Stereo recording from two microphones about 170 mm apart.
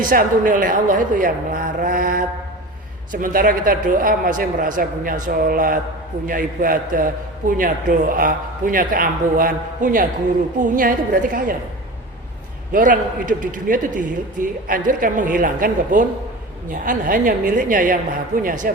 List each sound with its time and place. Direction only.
0.0 s a man's voice: 55° right (ahead or behind)
12.7 s a man's voice: 50° right (ahead or behind)